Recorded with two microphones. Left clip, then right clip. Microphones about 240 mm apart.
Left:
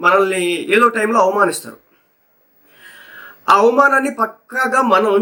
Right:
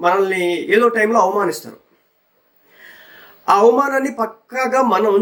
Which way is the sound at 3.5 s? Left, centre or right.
Centre.